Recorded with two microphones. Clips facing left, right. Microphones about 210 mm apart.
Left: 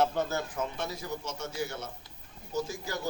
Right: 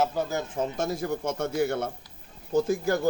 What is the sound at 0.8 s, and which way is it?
A man's voice, 50° right (ahead or behind).